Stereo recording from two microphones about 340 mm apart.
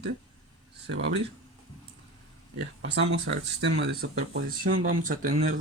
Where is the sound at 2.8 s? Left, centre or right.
Right.